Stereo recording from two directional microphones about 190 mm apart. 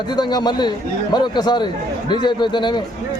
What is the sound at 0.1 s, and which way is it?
A man's voice, 20° left (ahead or behind).